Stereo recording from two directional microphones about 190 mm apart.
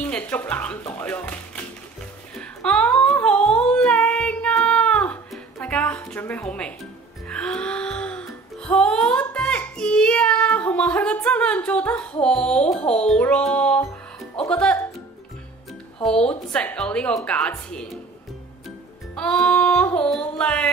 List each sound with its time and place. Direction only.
0.0 s music: 10° left (ahead or behind)
2.4 s humming: 5° left (ahead or behind)
8.5 s a child's voice: 5° left (ahead or behind)
16.0 s a child's voice: 5° left (ahead or behind)
19.1 s music: 5° left (ahead or behind)